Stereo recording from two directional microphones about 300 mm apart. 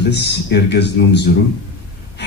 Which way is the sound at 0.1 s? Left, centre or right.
Left.